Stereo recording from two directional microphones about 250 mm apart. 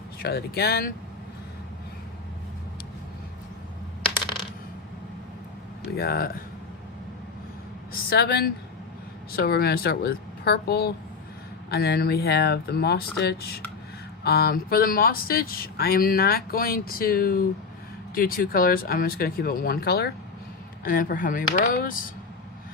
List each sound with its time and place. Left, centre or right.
0.2 s speech: left
6.0 s speech: left
8.1 s speech: left